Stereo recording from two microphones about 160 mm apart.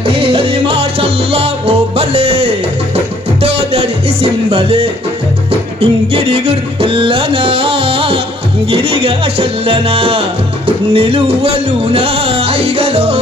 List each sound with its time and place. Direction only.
0.0 s music: 35° right (ahead or behind)